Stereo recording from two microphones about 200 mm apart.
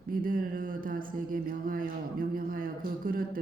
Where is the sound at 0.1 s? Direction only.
45° right (ahead or behind).